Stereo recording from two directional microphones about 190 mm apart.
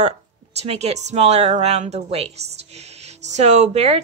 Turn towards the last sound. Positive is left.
turn(degrees=-35)  # may be behind; listen again after turning